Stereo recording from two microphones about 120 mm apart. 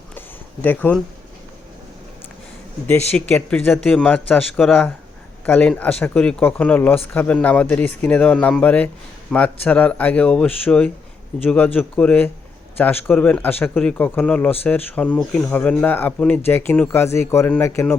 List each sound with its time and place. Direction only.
0.6 s speech: 15° left (ahead or behind)
2.8 s a man's voice: 10° left (ahead or behind)